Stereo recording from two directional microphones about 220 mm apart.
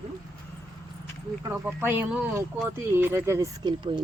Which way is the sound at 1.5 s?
10° right (ahead or behind).